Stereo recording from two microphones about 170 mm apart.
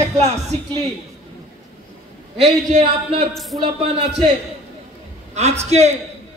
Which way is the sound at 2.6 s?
45° right (ahead or behind).